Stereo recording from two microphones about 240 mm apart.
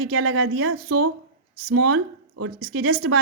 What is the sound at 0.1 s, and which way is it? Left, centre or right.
Speech, right.